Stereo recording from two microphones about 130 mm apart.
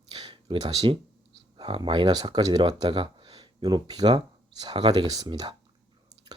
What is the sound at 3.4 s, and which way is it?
Speech, 30° right (ahead or behind).